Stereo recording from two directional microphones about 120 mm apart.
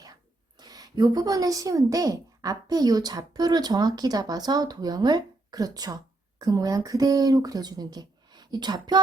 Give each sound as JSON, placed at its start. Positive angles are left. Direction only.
{"t": 0.6, "sound": "a woman's voice", "side_deg": -30}